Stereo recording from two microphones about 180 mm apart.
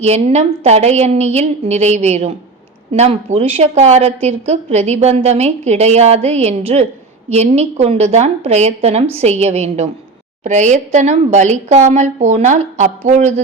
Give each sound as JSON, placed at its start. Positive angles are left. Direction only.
{"t": 0.0, "sound": "a woman's voice", "side_deg": -35}